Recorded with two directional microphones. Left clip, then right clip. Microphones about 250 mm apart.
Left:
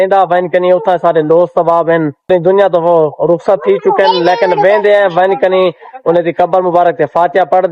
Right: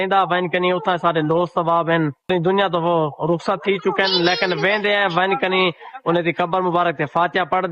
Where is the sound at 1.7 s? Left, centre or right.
Centre.